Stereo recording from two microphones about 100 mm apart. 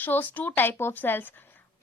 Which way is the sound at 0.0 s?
20° left (ahead or behind).